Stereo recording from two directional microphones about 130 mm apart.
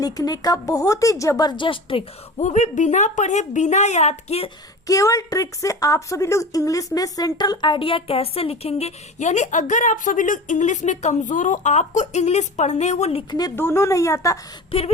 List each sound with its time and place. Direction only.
0.0 s a woman's voice: 30° left (ahead or behind)
2.4 s a woman's voice: 65° left (ahead or behind)
4.9 s a woman's voice: 25° left (ahead or behind); by 13.2 s 55° left (ahead or behind)
13.6 s a woman's voice: 20° left (ahead or behind)
14.7 s a sound: 45° left (ahead or behind)